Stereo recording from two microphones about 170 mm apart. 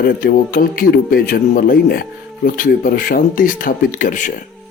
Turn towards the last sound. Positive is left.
turn(degrees=50)  # may be behind; listen again after turning